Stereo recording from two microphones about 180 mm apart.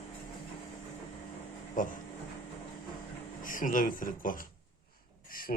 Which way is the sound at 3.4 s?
50° left (ahead or behind).